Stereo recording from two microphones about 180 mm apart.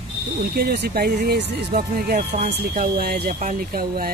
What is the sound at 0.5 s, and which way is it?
Speech, 60° right (ahead or behind).